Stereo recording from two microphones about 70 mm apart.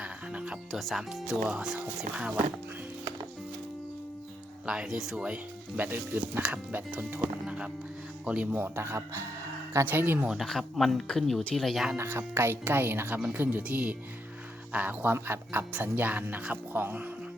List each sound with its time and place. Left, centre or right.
0.0 s music: centre
0.7 s speech: centre
4.6 s speech: centre
7.4 s speech: centre
8.5 s speech: right
9.8 s speech: right
10.2 s speech: centre
11.9 s speech: right
13.6 s speech: right